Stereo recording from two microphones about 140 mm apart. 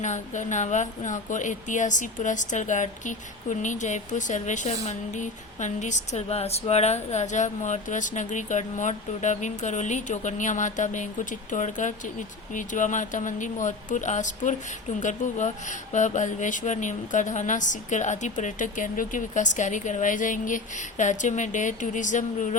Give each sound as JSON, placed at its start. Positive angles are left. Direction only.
{"t": 0.0, "sound": "speech", "side_deg": 60}